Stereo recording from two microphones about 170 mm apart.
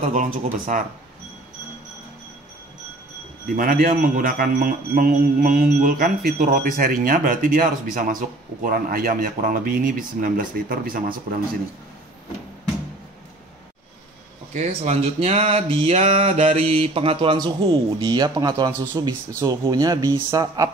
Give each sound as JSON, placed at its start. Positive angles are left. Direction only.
{"t": 0.0, "sound": "speech", "side_deg": -50}
{"t": 3.4, "sound": "a man's voice", "side_deg": -60}
{"t": 14.5, "sound": "speech", "side_deg": -40}